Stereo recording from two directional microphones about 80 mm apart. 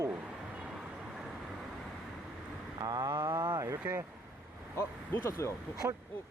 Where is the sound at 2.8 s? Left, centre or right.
Right.